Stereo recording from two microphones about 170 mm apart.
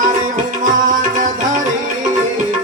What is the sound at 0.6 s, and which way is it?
Music, 50° right (ahead or behind).